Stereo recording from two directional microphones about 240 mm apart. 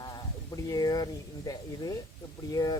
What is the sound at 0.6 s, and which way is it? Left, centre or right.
Speech, centre.